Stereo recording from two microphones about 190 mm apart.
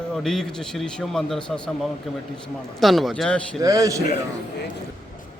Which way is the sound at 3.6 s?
15° right (ahead or behind).